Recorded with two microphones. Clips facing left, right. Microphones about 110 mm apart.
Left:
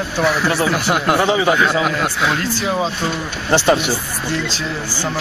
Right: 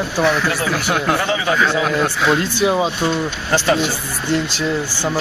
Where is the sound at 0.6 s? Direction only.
10° left (ahead or behind).